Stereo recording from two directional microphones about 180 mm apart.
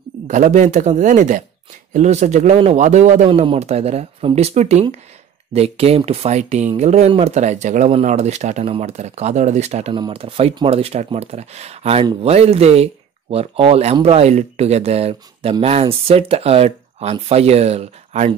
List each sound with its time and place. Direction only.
0.3 s speech: 40° right (ahead or behind)